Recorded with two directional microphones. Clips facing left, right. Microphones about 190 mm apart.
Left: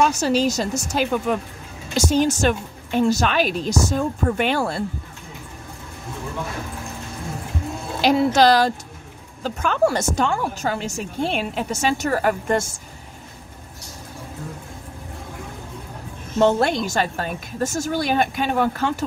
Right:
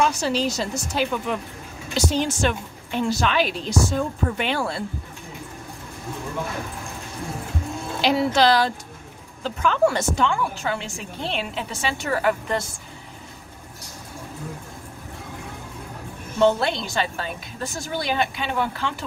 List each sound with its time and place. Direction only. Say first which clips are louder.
0.0 s a woman's voice: left 3 dB; 45° left (ahead or behind)
8.0 s a woman's voice: left 3 dB; 45° left (ahead or behind)
16.3 s a woman's voice: left 2 dB; 45° left (ahead or behind)